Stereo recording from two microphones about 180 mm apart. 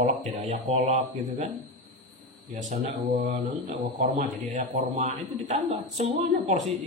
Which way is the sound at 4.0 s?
40° right (ahead or behind).